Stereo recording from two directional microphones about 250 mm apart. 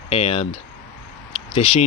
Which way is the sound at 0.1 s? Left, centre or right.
Left.